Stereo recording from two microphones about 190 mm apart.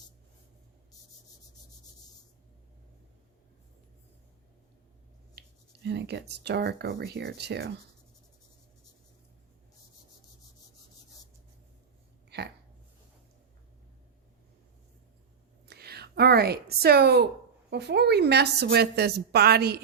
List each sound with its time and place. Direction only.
5.8 s a woman's voice: 60° right (ahead or behind)
12.3 s a sound: 60° right (ahead or behind)
15.6 s a woman's voice: 55° right (ahead or behind)